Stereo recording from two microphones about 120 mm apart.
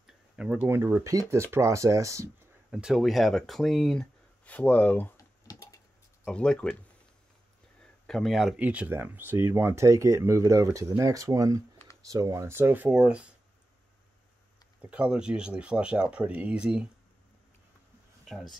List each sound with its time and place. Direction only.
0.0 s tick-tock: 5° right (ahead or behind)
0.7 s speech: 20° right (ahead or behind)
2.7 s speech: 5° right (ahead or behind); by 5.1 s 15° left (ahead or behind)
5.1 s typing: 30° left (ahead or behind)
6.2 s speech: 5° left (ahead or behind)
7.8 s speech: 5° left (ahead or behind)
14.8 s speech: 10° right (ahead or behind)
18.2 s speech: centre (ahead or behind)